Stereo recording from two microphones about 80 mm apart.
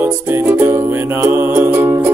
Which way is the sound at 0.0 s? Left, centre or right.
Right.